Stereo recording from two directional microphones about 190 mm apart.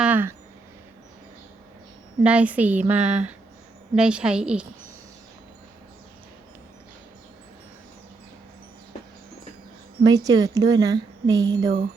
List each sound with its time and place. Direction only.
0.0 s a sound: 10° right (ahead or behind)
2.2 s a woman's voice: 5° right (ahead or behind)
10.0 s a woman's voice: 20° right (ahead or behind)